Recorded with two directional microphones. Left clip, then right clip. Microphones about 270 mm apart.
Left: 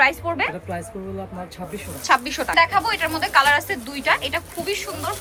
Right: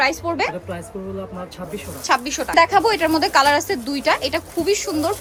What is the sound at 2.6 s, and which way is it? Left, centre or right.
Speech, right.